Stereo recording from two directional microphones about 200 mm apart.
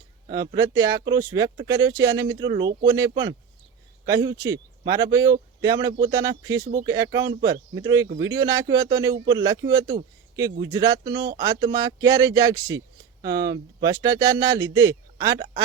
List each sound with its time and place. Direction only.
0.3 s speech: 15° right (ahead or behind)